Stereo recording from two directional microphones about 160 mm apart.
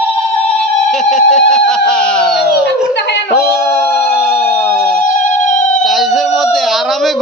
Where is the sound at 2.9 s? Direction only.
90° left.